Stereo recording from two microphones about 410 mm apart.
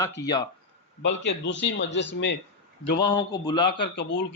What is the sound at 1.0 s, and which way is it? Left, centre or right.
Speech, left.